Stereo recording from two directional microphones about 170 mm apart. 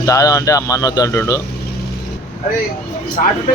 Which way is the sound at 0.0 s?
20° left (ahead or behind).